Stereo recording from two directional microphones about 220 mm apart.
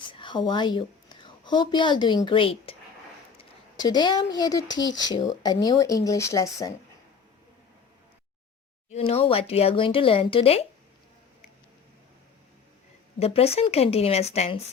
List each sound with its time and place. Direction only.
0.1 s a woman's voice: 20° left (ahead or behind)
3.8 s speech: 20° left (ahead or behind)
8.9 s speech: 25° left (ahead or behind)
13.1 s speech: 25° left (ahead or behind)